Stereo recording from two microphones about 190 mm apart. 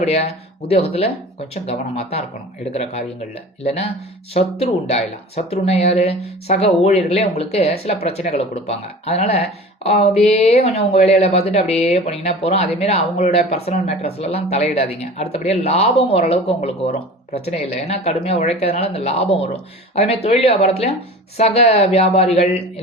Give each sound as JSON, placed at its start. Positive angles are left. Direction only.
{"t": 0.0, "sound": "speech", "side_deg": 35}